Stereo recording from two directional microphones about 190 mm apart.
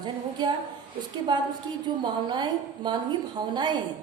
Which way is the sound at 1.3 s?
25° right (ahead or behind).